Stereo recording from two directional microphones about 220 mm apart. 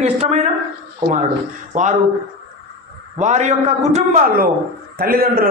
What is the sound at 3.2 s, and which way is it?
A man's voice, 30° right (ahead or behind).